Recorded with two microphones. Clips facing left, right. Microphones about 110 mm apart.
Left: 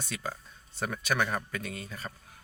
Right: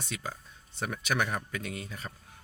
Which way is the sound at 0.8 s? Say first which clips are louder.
Left 1 dB; 20° right (ahead or behind).